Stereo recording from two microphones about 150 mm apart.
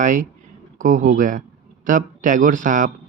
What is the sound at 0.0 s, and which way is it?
Speech, 60° right (ahead or behind).